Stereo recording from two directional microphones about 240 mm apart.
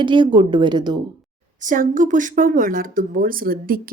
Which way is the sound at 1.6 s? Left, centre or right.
Right.